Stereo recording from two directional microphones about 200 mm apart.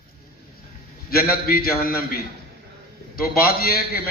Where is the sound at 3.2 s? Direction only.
50° left (ahead or behind).